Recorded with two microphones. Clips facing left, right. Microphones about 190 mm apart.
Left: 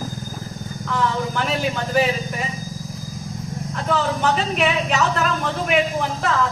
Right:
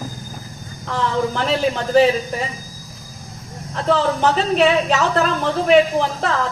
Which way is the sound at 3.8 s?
30° right (ahead or behind).